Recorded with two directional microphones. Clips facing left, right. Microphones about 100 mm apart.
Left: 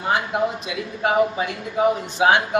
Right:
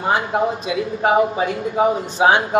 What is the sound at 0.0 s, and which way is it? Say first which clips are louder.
A man's voice: right 3 dB; 30° right (ahead or behind).